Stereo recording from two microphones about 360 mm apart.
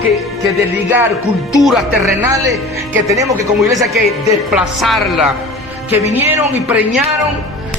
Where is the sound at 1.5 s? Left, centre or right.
Centre.